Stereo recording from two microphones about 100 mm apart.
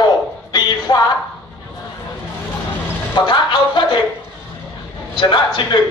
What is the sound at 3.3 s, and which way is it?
Speech, 55° left (ahead or behind).